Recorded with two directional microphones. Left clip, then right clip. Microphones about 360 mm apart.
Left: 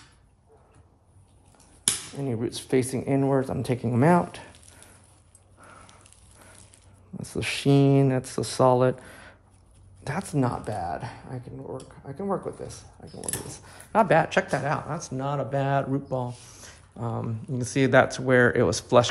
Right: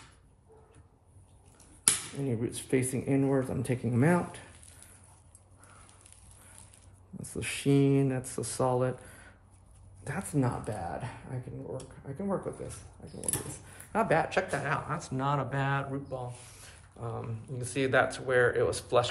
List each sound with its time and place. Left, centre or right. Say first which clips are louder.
2.1 s speech: left 4 dB; left
7.2 s speech: left 7 dB; left
17.2 s speech: left 8 dB; centre